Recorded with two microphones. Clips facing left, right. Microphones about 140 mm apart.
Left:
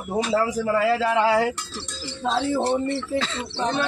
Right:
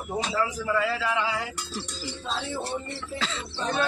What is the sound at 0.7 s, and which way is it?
Speech, 60° left (ahead or behind).